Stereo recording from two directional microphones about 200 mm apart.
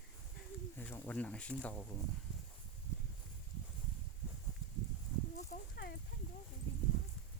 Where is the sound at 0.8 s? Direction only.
10° left (ahead or behind).